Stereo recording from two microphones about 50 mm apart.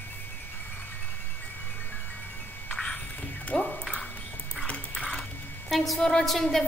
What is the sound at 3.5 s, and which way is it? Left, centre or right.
Music, centre.